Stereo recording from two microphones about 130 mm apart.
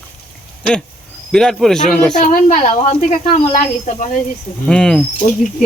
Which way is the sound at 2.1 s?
80° left.